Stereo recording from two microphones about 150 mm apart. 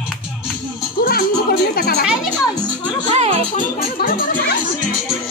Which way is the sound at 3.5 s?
80° left.